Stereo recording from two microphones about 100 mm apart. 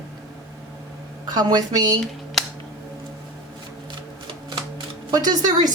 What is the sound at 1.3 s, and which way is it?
Speech, 45° right (ahead or behind).